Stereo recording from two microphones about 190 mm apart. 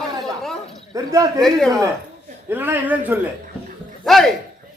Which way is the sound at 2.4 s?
10° right (ahead or behind).